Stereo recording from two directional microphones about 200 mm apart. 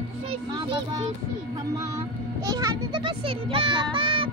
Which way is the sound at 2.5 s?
15° right (ahead or behind).